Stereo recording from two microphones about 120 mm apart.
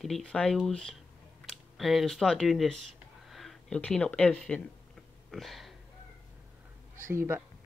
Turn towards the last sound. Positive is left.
turn(degrees=-20)  # may be behind; listen again after turning